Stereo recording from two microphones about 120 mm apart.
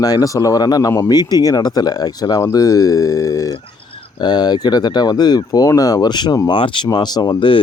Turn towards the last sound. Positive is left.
turn(degrees=45)  # may be behind; listen again after turning